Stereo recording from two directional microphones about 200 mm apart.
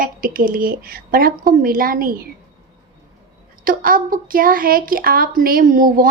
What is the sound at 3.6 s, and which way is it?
A woman's voice, 45° right (ahead or behind).